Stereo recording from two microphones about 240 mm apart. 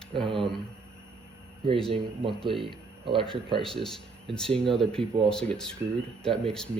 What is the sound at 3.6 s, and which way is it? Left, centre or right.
Speech, centre.